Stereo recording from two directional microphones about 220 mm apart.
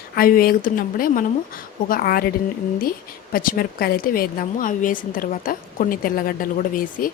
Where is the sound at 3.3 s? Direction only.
40° left (ahead or behind).